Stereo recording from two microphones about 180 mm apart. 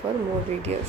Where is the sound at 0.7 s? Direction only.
35° right (ahead or behind).